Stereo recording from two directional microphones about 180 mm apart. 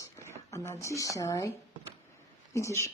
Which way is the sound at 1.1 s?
20° left (ahead or behind).